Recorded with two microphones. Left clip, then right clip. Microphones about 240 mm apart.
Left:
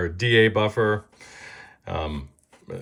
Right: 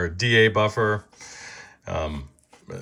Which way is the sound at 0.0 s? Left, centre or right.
Centre.